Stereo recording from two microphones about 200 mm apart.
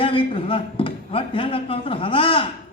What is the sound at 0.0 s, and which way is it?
Speech, 25° left (ahead or behind).